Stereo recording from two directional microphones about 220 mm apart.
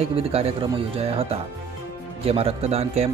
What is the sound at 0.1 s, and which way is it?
Speech, 25° right (ahead or behind).